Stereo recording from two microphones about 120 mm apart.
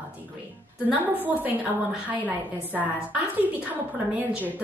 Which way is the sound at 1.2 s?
15° right (ahead or behind).